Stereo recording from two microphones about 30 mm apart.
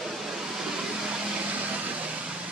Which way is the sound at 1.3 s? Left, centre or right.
Right.